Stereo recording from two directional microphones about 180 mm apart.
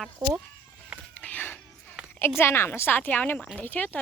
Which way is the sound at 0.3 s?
Centre (ahead or behind).